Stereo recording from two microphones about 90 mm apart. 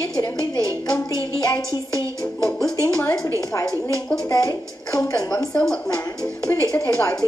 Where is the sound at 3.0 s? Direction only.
25° left (ahead or behind).